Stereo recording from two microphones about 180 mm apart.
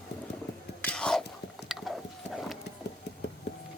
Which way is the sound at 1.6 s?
Centre (ahead or behind).